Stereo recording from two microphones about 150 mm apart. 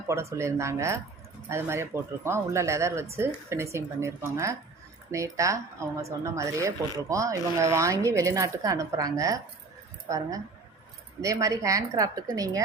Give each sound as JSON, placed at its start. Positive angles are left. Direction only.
{"t": 0.1, "sound": "speech", "side_deg": -20}